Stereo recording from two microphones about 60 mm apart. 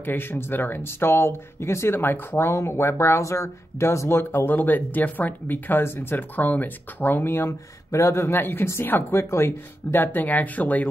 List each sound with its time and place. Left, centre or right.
0.0 s speech: left
4.5 s speech: left
7.9 s a man's voice: left
8.4 s speech: left